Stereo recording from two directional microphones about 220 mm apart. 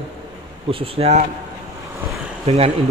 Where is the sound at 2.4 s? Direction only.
25° right (ahead or behind).